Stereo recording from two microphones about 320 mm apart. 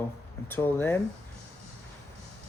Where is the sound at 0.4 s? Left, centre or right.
Centre.